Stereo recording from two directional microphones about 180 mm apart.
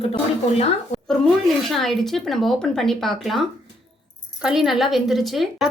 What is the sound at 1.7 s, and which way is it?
Speech, centre (ahead or behind).